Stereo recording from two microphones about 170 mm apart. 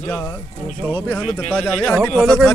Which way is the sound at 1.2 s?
5° left (ahead or behind).